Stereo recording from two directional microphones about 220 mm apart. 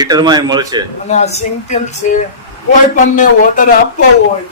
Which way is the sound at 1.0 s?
30° left (ahead or behind).